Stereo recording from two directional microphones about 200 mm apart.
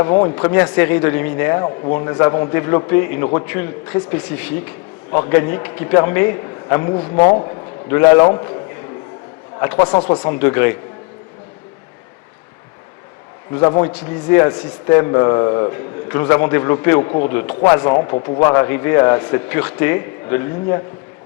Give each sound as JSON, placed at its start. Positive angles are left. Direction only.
{"t": 0.1, "sound": "speech", "side_deg": 25}
{"t": 1.6, "sound": "speech", "side_deg": 25}
{"t": 9.6, "sound": "speech", "side_deg": 15}
{"t": 10.0, "sound": "a man's voice", "side_deg": 30}
{"t": 10.4, "sound": "speech", "side_deg": 10}
{"t": 13.6, "sound": "a man's voice", "side_deg": 20}